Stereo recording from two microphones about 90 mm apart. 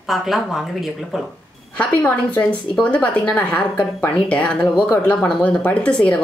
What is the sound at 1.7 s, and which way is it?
A woman's voice, 15° left (ahead or behind).